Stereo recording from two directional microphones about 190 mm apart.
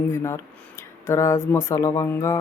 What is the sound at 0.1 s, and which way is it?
Speech, 15° left (ahead or behind).